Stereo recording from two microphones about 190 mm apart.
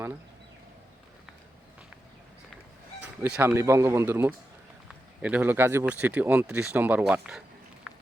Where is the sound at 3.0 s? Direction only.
10° right (ahead or behind).